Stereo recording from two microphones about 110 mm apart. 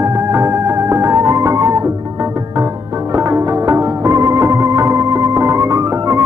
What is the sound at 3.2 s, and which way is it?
Music, 25° right (ahead or behind).